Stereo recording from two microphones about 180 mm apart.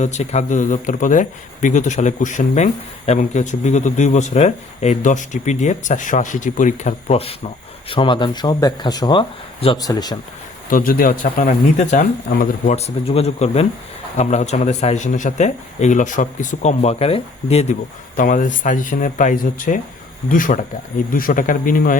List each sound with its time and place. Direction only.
0.0 s speech: 40° left (ahead or behind); by 10.2 s 20° left (ahead or behind)
10.7 s speech: 50° left (ahead or behind); by 17.7 s 35° left (ahead or behind)
18.2 s speech: 45° left (ahead or behind)